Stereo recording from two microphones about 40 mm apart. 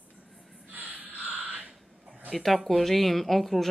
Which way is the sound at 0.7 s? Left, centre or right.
Right.